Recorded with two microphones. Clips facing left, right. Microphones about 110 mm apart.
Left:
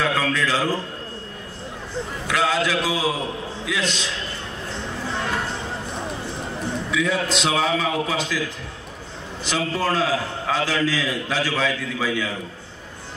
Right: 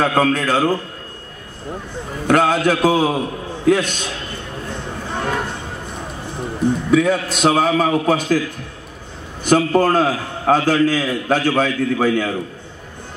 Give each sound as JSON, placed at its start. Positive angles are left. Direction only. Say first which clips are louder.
{"t": 0.0, "sound": "a man's voice", "louder": "right 6 dB", "side_deg": -45}
{"t": 2.2, "sound": "a man's voice", "louder": "right 7 dB", "side_deg": -50}
{"t": 4.6, "sound": "music", "louder": "even", "side_deg": -50}
{"t": 6.9, "sound": "a man's voice", "louder": "right 6 dB", "side_deg": -50}
{"t": 9.4, "sound": "a man's voice", "louder": "right 10 dB", "side_deg": -50}